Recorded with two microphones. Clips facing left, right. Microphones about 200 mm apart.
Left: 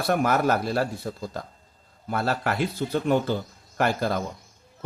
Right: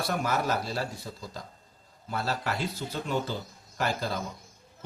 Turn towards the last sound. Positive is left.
turn(degrees=60)  # may be behind; listen again after turning